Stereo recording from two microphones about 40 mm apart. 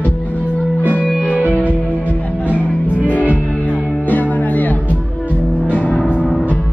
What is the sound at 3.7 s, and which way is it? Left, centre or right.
Music, left.